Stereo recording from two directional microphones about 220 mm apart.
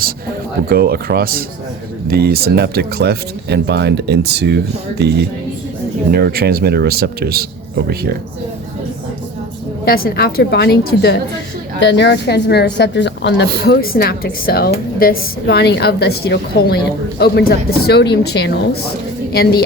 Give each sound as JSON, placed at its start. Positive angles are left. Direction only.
{"t": 0.7, "sound": "speech", "side_deg": -45}
{"t": 9.8, "sound": "a woman's voice", "side_deg": 45}